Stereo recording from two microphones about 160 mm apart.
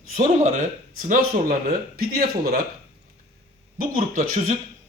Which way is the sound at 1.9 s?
70° right (ahead or behind).